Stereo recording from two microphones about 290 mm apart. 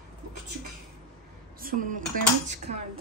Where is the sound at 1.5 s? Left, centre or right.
Right.